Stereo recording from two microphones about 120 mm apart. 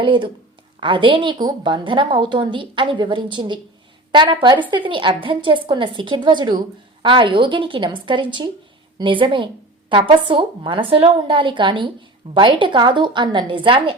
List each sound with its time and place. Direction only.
0.0 s a woman's voice: 45° right (ahead or behind)